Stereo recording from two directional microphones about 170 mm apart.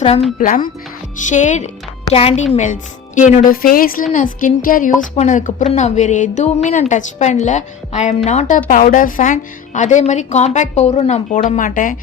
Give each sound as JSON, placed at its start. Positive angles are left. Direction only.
{"t": 0.3, "sound": "a woman's voice", "side_deg": 50}